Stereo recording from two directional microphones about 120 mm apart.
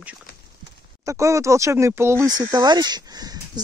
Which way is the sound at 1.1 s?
25° right (ahead or behind).